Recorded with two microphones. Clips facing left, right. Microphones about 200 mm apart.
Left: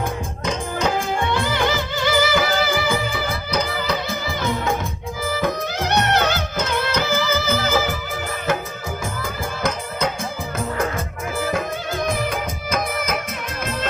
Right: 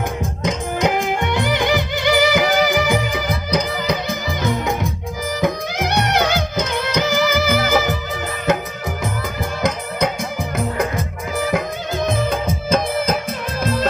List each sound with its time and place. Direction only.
0.4 s music: 20° right (ahead or behind)
10.6 s music: 15° right (ahead or behind)